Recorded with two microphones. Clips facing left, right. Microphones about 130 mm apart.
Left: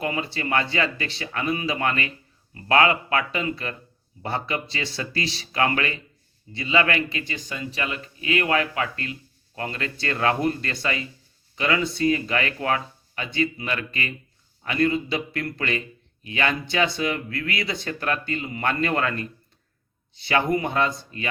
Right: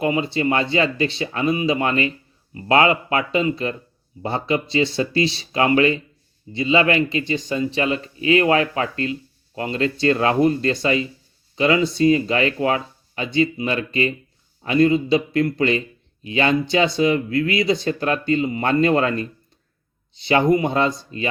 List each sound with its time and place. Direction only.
0.0 s speech: 20° right (ahead or behind)